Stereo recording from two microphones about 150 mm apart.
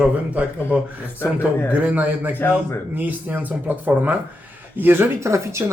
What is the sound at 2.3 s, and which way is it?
Speech, 15° left (ahead or behind).